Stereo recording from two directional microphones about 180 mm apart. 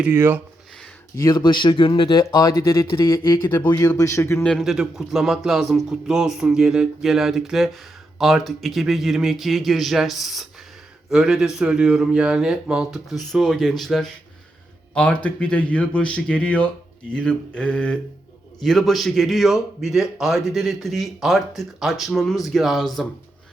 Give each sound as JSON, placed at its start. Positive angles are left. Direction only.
{"t": 0.0, "sound": "speech", "side_deg": -10}
{"t": 1.1, "sound": "speech", "side_deg": 20}
{"t": 4.5, "sound": "a man's voice", "side_deg": 0}